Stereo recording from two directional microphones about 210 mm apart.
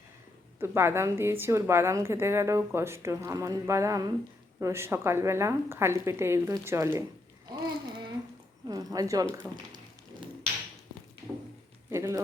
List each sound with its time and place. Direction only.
0.6 s a woman's voice: 10° right (ahead or behind)
7.5 s babbling: 20° right (ahead or behind)
8.6 s speech: 15° right (ahead or behind)
11.9 s speech: 15° right (ahead or behind)